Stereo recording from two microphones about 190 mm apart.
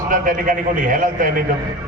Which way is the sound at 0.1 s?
45° right (ahead or behind).